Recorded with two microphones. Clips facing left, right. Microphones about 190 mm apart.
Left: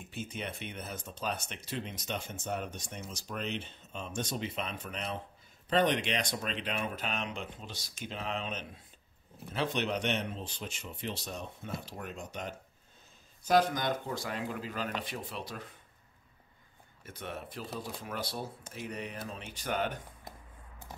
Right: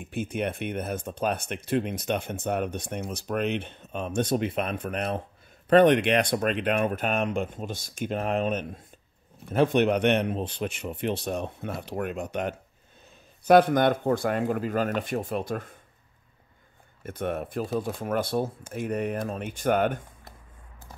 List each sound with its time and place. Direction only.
0.0 s speech: 55° right (ahead or behind)
17.0 s speech: 50° right (ahead or behind)